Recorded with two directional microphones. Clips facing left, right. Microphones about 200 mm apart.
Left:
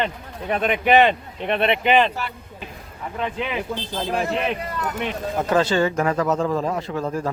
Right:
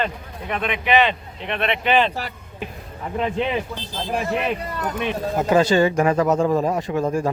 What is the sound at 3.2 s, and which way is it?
Speech, 30° right (ahead or behind).